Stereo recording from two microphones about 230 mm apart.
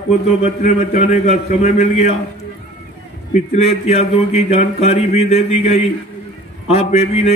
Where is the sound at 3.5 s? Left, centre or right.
Left.